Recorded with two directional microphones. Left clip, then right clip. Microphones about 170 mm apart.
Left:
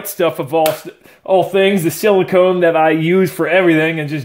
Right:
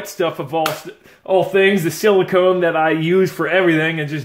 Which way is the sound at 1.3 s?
35° left (ahead or behind).